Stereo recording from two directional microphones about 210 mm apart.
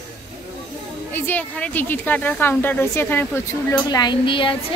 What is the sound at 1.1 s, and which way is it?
Speech, 10° left (ahead or behind).